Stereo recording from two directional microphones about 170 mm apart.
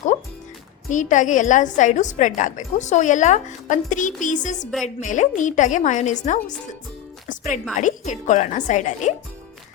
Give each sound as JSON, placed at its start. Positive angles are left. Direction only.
{"t": 0.9, "sound": "a woman's voice", "side_deg": 45}